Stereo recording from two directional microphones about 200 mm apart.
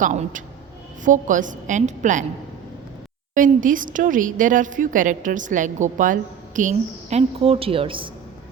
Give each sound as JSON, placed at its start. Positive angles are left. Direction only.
{"t": 0.0, "sound": "a woman's voice", "side_deg": -40}
{"t": 3.3, "sound": "a woman's voice", "side_deg": -40}